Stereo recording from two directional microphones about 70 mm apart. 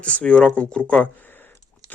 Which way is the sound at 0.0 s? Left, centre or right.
Centre.